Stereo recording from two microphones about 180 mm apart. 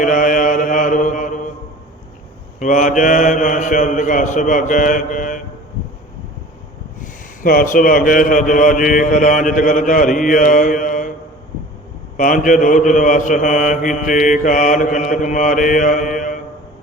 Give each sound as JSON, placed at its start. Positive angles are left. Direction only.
{"t": 0.0, "sound": "mantra", "side_deg": 50}
{"t": 2.6, "sound": "mantra", "side_deg": 45}
{"t": 7.4, "sound": "mantra", "side_deg": 50}
{"t": 12.1, "sound": "mantra", "side_deg": 45}